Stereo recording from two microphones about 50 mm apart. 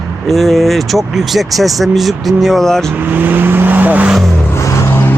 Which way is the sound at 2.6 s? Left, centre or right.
Centre.